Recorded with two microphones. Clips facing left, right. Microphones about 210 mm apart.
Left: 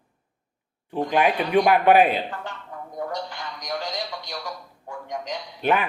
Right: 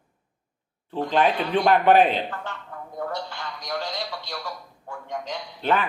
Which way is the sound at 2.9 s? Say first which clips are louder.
Even; 15° left (ahead or behind).